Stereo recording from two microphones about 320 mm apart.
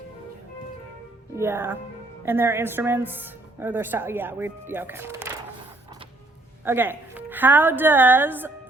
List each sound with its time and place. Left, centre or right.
1.4 s a woman's voice: centre
6.7 s a woman's voice: centre